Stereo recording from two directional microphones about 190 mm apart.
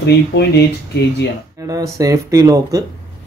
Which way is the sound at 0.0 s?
60° left (ahead or behind).